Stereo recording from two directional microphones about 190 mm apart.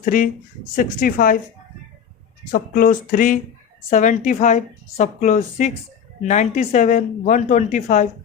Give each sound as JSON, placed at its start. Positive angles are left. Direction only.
{"t": 0.0, "sound": "speech", "side_deg": 45}
{"t": 2.5, "sound": "a woman's voice", "side_deg": 45}